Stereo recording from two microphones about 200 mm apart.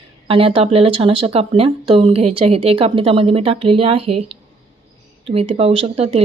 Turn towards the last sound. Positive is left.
turn(degrees=-30)  # may be behind; listen again after turning